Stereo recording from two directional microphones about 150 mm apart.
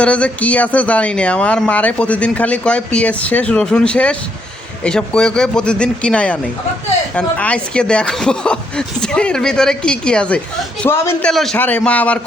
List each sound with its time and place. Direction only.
0.0 s speech: 10° left (ahead or behind)
11.3 s speech: 5° left (ahead or behind)